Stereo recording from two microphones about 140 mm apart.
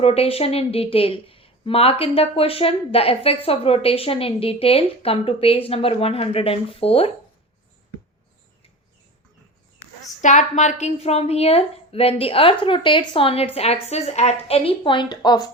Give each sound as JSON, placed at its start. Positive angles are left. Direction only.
{"t": 0.0, "sound": "a woman's voice", "side_deg": 45}
{"t": 10.2, "sound": "a woman's voice", "side_deg": 60}